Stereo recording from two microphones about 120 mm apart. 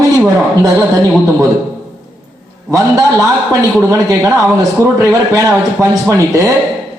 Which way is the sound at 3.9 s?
25° right (ahead or behind).